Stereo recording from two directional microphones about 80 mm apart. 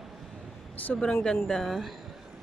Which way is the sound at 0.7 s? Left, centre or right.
Left.